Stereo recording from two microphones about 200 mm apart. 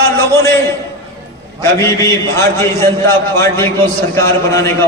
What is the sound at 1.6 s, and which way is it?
A man's voice, 15° left (ahead or behind).